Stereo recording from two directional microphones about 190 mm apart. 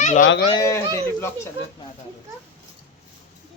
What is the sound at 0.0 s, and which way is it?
Speech, 40° left (ahead or behind).